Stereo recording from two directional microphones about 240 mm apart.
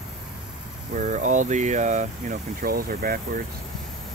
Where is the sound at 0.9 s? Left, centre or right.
Right.